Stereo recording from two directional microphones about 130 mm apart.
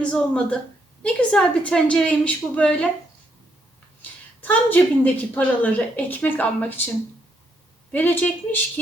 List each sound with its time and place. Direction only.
0.0 s a woman's voice: 10° left (ahead or behind)
4.0 s a woman's voice: 15° left (ahead or behind)
7.9 s a woman's voice: 10° left (ahead or behind)